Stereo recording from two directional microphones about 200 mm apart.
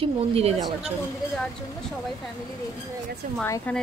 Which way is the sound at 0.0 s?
30° right (ahead or behind).